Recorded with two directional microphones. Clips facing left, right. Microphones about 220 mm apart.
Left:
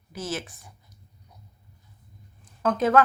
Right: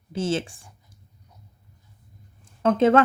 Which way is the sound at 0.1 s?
25° right (ahead or behind).